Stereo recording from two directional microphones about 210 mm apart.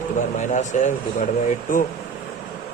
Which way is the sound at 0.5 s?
35° left (ahead or behind).